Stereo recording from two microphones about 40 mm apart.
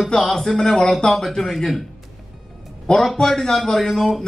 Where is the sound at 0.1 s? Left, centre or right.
Centre.